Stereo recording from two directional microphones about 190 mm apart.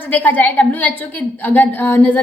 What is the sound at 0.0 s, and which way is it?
A woman's voice, 10° left (ahead or behind).